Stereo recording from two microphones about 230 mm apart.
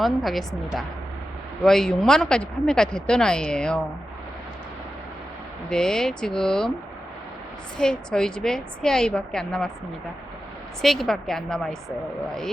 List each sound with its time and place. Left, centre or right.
0.0 s speech: centre
5.6 s speech: centre
7.8 s speech: centre
10.8 s speech: centre